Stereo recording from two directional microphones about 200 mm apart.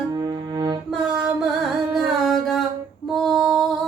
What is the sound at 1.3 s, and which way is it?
Music, centre (ahead or behind).